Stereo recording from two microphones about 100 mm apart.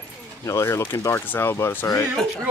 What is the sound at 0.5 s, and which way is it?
Speech, 30° left (ahead or behind).